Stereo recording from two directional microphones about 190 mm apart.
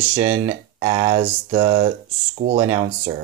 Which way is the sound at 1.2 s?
25° right (ahead or behind).